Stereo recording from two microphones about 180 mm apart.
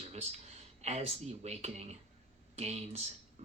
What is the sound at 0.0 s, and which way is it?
Speech, 35° right (ahead or behind).